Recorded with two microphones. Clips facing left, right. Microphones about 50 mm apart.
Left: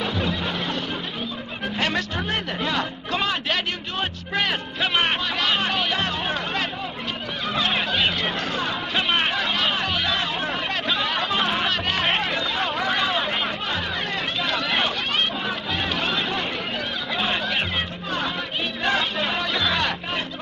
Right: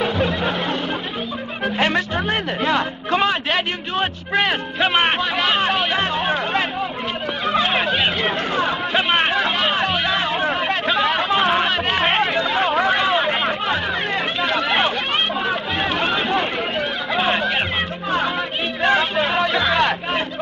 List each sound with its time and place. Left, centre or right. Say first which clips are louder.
0.0 s music: right 5 dB; centre
1.8 s a man's voice: right 5 dB; right
9.4 s music: right 4 dB; centre
14.4 s a sound: right 5 dB; centre
15.4 s music: right 5 dB; centre
18.8 s music: right 6 dB; centre